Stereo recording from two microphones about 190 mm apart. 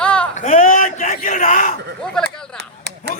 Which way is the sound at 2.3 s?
5° left (ahead or behind).